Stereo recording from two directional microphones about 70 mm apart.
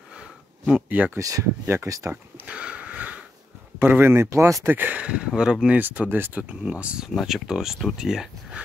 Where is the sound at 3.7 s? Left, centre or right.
Right.